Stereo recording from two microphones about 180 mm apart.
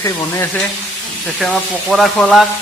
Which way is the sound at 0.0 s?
15° left (ahead or behind).